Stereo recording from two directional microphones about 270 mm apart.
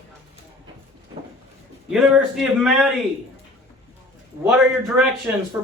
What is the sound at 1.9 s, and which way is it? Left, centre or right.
Speech, centre.